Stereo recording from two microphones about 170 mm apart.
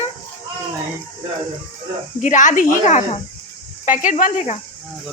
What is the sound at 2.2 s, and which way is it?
Speech, 45° left (ahead or behind).